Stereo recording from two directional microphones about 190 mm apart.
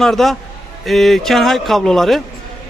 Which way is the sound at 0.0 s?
Centre (ahead or behind).